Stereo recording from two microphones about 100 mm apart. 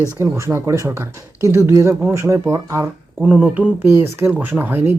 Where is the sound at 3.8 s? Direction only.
25° right (ahead or behind).